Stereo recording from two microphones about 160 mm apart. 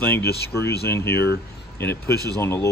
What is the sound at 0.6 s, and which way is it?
Speech, 90° left.